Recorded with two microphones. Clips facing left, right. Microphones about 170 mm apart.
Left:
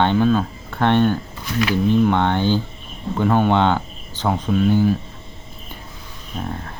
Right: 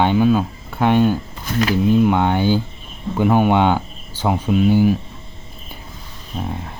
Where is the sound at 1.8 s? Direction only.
10° right (ahead or behind).